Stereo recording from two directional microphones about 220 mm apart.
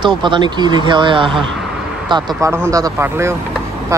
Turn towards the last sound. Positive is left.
turn(degrees=-15)  # may be behind; listen again after turning